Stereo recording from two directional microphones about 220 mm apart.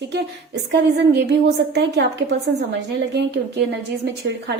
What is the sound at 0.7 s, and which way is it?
A woman's voice, 50° right (ahead or behind).